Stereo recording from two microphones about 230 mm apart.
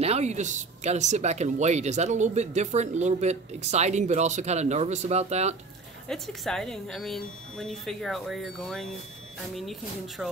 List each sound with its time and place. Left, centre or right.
0.0 s a woman's voice: right
6.0 s speech: centre